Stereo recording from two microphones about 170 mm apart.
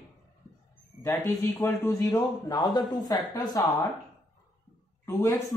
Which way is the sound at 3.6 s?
10° left (ahead or behind).